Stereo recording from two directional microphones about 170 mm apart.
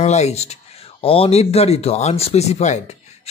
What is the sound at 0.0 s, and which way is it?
A man's voice, 40° left (ahead or behind).